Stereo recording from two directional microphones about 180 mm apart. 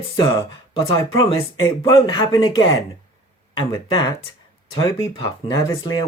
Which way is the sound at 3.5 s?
25° left (ahead or behind).